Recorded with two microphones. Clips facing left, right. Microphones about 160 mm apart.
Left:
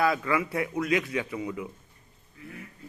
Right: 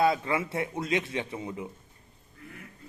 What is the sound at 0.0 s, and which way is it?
A man's voice, 25° right (ahead or behind).